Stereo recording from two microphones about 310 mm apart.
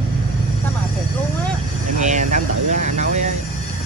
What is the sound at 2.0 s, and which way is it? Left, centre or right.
Speech, right.